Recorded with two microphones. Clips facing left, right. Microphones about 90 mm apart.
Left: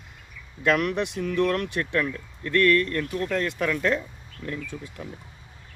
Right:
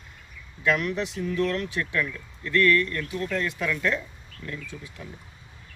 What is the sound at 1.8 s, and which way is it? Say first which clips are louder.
Speech: left 2 dB; 45° left (ahead or behind).